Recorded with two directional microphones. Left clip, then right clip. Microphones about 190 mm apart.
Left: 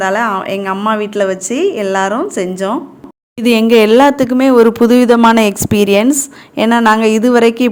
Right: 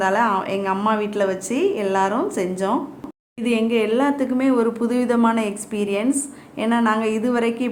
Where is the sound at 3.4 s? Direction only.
50° left (ahead or behind).